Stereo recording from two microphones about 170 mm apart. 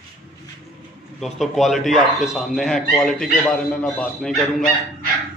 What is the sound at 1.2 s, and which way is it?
Speech, centre (ahead or behind).